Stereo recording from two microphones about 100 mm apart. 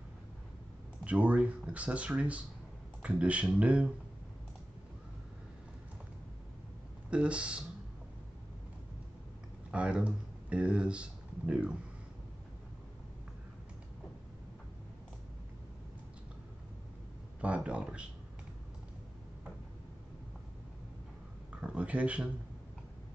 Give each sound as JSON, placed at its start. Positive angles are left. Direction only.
{"t": 1.0, "sound": "speech", "side_deg": -15}
{"t": 7.1, "sound": "speech", "side_deg": -10}
{"t": 9.7, "sound": "speech", "side_deg": -10}
{"t": 17.4, "sound": "speech", "side_deg": -10}
{"t": 21.5, "sound": "speech", "side_deg": -10}